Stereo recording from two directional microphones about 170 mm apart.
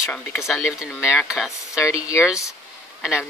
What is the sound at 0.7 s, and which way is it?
Speech, 5° right (ahead or behind).